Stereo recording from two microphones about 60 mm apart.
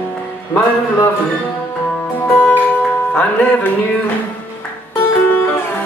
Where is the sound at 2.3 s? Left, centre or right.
Left.